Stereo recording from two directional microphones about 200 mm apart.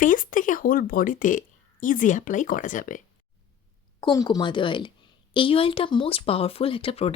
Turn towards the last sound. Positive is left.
turn(degrees=30)  # may be behind; listen again after turning